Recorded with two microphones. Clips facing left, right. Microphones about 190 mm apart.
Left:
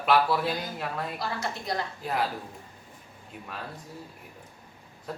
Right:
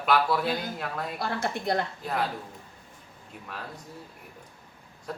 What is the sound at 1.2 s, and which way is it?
Speech, 55° right (ahead or behind).